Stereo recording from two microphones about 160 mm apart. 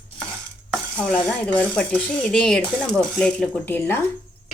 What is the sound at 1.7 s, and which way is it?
Speech, 5° left (ahead or behind).